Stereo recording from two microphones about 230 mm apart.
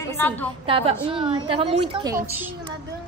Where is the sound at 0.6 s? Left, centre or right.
Right.